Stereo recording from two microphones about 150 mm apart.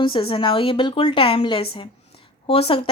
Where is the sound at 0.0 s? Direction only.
35° left (ahead or behind).